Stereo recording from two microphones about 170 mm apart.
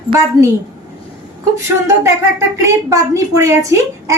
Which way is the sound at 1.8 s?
15° right (ahead or behind).